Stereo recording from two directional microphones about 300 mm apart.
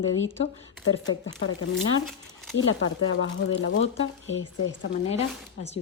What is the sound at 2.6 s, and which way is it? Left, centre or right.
Speech, left.